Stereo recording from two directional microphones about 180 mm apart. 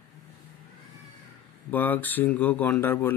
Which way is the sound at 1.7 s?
10° left (ahead or behind).